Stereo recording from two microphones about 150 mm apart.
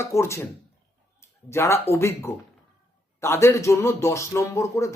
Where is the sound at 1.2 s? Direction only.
15° left (ahead or behind).